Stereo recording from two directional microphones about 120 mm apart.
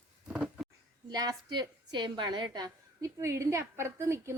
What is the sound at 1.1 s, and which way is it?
A woman's voice, 35° right (ahead or behind).